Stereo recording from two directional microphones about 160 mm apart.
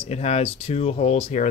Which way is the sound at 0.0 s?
40° left (ahead or behind).